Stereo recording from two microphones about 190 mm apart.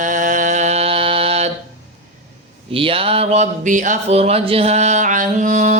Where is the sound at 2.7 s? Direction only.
30° right (ahead or behind).